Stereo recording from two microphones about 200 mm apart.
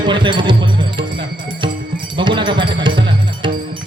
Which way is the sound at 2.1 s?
25° right (ahead or behind).